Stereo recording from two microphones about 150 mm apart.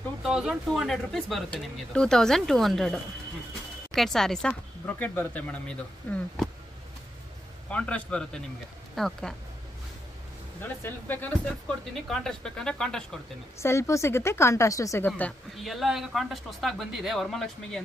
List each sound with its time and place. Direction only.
0.2 s speech: 5° right (ahead or behind)
7.7 s speech: 10° left (ahead or behind)
10.6 s speech: 15° left (ahead or behind)
13.6 s speech: 20° left (ahead or behind)
15.5 s speech: centre (ahead or behind)